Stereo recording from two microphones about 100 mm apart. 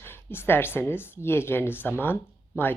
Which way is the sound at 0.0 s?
20° left (ahead or behind).